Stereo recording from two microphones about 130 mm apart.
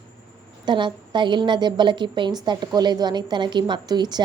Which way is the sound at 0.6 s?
35° right (ahead or behind).